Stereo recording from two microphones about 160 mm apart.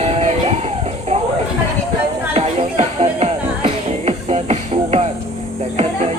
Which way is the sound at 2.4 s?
40° right (ahead or behind).